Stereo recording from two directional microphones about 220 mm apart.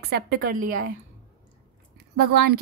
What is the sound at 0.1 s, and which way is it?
Speech, 45° right (ahead or behind).